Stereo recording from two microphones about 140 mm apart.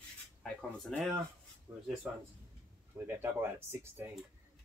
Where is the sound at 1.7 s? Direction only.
25° right (ahead or behind).